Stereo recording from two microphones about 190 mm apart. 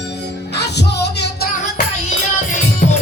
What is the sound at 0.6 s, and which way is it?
Music, 60° left (ahead or behind).